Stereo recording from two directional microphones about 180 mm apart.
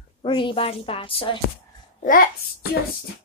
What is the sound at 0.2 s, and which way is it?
A woman's voice, 30° left (ahead or behind).